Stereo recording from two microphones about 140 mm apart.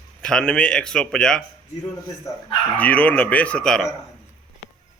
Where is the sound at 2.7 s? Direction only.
10° left (ahead or behind).